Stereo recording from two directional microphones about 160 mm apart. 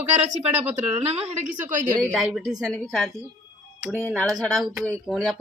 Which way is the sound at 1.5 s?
50° right (ahead or behind).